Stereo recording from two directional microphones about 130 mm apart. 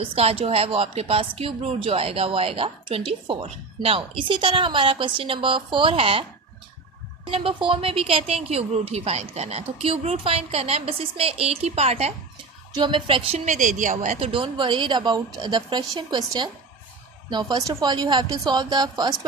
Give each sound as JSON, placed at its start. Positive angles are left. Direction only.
{"t": 0.1, "sound": "speech", "side_deg": -50}
{"t": 7.3, "sound": "speech", "side_deg": -45}
{"t": 12.7, "sound": "a woman's voice", "side_deg": -35}
{"t": 13.4, "sound": "speech", "side_deg": -80}
{"t": 14.2, "sound": "a woman's voice", "side_deg": -40}